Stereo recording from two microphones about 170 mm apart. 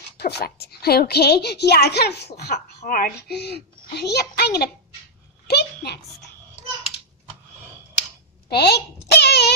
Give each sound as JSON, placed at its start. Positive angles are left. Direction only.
{"t": 0.2, "sound": "a woman's voice", "side_deg": 75}
{"t": 8.5, "sound": "a woman's voice", "side_deg": 70}